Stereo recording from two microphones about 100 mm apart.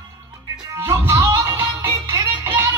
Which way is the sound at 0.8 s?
30° right (ahead or behind).